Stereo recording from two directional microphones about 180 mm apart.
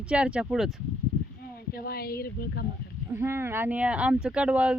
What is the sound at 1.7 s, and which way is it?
Speech, 60° left (ahead or behind).